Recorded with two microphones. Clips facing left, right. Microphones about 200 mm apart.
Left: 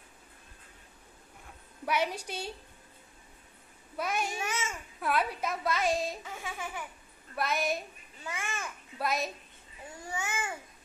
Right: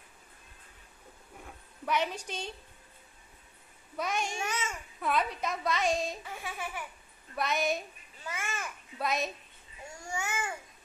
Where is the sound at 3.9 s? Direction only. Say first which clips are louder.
Even; 5° left (ahead or behind).